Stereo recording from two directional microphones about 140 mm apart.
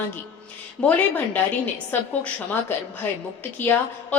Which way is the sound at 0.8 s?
10° left (ahead or behind).